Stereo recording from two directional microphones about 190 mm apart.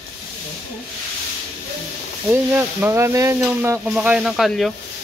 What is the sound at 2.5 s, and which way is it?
Stir, 10° right (ahead or behind).